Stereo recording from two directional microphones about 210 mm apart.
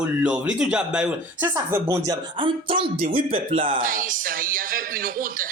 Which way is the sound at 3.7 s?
40° right (ahead or behind).